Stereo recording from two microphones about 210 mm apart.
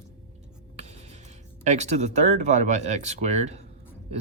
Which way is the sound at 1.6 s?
35° right (ahead or behind).